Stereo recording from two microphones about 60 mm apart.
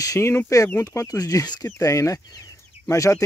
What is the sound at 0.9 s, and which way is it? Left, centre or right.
Speech, left.